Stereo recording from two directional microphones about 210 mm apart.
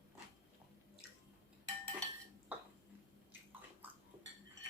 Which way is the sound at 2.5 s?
5° right (ahead or behind).